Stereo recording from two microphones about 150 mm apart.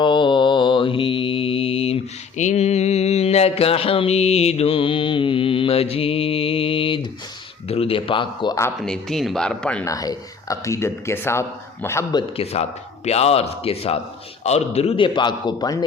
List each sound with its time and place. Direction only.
0.0 s mantra: 30° left (ahead or behind)
7.7 s a man's voice: 40° left (ahead or behind)
8.8 s speech: centre (ahead or behind)
9.8 s speech: 25° left (ahead or behind)
12.1 s a man's voice: 40° left (ahead or behind); by 15.8 s 25° left (ahead or behind)